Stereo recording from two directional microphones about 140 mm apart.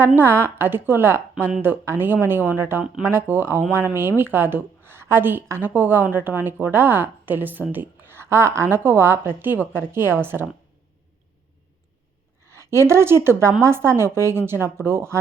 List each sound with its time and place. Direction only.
0.2 s a woman's voice: 15° right (ahead or behind)
12.5 s a woman's voice: 20° right (ahead or behind)